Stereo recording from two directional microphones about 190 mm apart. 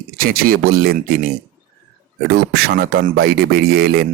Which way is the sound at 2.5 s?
55° right (ahead or behind).